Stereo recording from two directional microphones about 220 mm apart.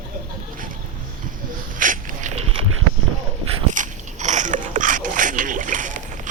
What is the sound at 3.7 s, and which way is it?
Biting, 35° right (ahead or behind).